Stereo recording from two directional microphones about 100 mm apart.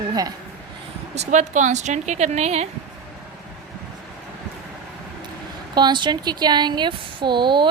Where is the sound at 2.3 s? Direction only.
90° right.